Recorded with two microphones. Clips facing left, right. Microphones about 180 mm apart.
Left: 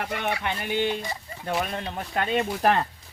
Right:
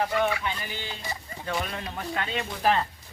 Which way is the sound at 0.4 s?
60° left (ahead or behind).